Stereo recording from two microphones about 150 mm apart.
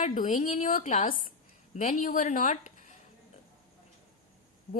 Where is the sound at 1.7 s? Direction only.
50° left (ahead or behind).